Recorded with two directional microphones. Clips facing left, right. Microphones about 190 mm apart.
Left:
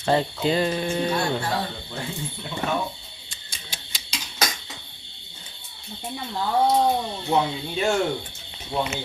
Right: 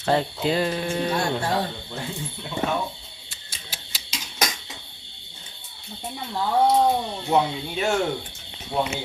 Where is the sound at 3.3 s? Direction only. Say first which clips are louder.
Even; 5° right (ahead or behind).